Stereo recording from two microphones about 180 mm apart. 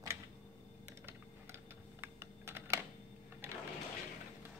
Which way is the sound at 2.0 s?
15° right (ahead or behind).